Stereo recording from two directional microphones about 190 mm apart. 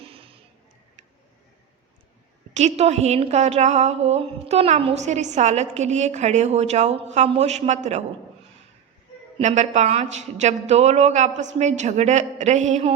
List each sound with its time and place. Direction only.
0.0 s a sound: 30° right (ahead or behind)
2.5 s a woman's voice: 35° right (ahead or behind)
9.4 s a woman's voice: 40° right (ahead or behind)